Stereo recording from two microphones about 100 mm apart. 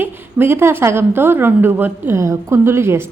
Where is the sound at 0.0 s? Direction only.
20° right (ahead or behind).